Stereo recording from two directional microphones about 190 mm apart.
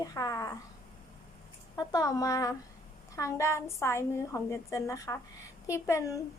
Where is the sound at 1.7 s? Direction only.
20° left (ahead or behind).